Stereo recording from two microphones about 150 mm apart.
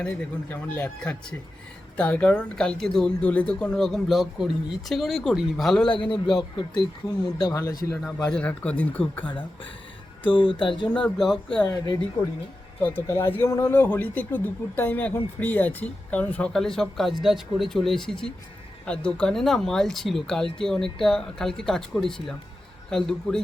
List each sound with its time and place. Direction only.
0.0 s speech: 10° left (ahead or behind)
5.9 s a man's voice: 35° left (ahead or behind)
8.0 s speech: 5° left (ahead or behind)
10.2 s a man's voice: 35° left (ahead or behind)
10.8 s speech: 5° left (ahead or behind)
11.6 s a man's voice: 25° left (ahead or behind)
12.8 s speech: 15° left (ahead or behind)